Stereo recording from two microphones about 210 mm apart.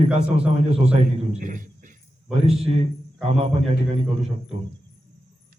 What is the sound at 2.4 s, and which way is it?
A man's voice, 30° right (ahead or behind).